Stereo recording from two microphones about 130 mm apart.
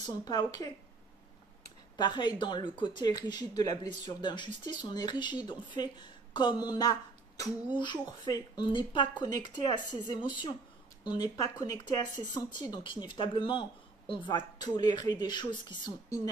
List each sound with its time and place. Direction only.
0.0 s speech: 30° left (ahead or behind)
2.0 s speech: 35° left (ahead or behind)